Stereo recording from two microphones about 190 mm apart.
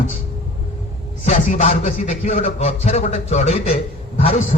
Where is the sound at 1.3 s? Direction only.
40° left (ahead or behind).